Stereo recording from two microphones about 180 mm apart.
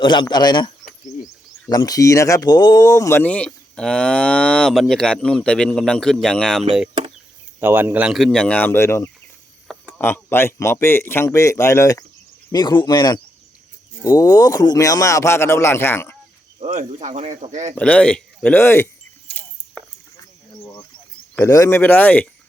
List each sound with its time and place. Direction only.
0.0 s speech: 25° left (ahead or behind)
1.7 s speech: 20° left (ahead or behind); by 6.7 s 5° left (ahead or behind)
7.6 s speech: 10° right (ahead or behind); by 16.1 s 15° left (ahead or behind)
16.6 s speech: 40° right (ahead or behind)
17.7 s speech: 5° left (ahead or behind)
19.3 s keys jangling: 10° left (ahead or behind)
21.3 s speech: 15° left (ahead or behind)